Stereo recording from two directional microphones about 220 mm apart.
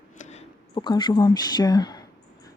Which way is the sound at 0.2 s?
30° left (ahead or behind).